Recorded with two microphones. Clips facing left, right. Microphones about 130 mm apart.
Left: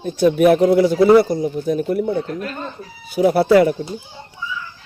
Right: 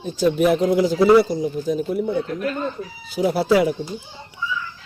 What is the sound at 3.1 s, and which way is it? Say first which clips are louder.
Speech: left 5 dB; 60° left (ahead or behind).